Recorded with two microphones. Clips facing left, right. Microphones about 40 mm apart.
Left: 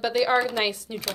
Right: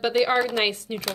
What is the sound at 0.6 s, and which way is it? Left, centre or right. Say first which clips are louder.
Speech: right 2 dB; right.